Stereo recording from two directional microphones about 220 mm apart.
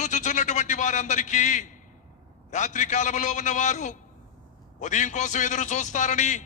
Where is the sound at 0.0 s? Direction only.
35° left (ahead or behind).